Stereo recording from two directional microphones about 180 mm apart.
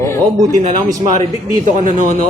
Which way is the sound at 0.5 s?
45° right (ahead or behind).